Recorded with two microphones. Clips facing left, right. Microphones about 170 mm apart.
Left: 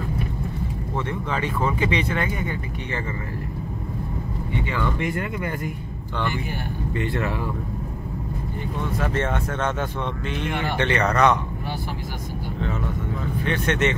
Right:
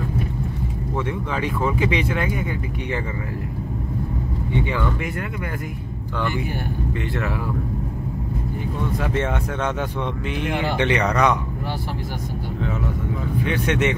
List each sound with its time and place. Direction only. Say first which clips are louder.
0.9 s speech: right 1 dB; 10° right (ahead or behind)
7.0 s speech: left 4 dB; centre (ahead or behind)
9.0 s speech: even; 10° right (ahead or behind)
13.4 s speech: right 1 dB; 10° right (ahead or behind)